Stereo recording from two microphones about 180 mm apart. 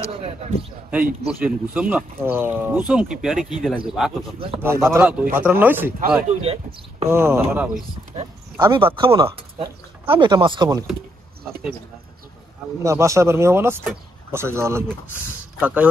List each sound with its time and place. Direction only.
0.1 s a sound: 35° right (ahead or behind)
1.4 s speech: 10° right (ahead or behind)
4.6 s speech: 15° right (ahead or behind)
6.2 s speech: 35° right (ahead or behind)
7.1 s speech: 15° right (ahead or behind)
8.2 s speech: 25° right (ahead or behind)
12.8 s speech: 15° right (ahead or behind)